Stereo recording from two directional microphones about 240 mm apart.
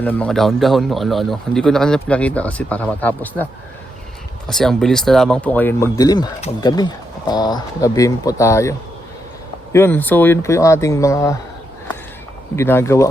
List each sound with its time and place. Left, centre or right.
0.0 s speech: centre
4.4 s speech: centre
9.7 s speech: centre
12.5 s speech: centre